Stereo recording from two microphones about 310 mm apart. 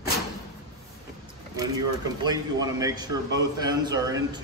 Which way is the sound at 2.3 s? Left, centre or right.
Centre.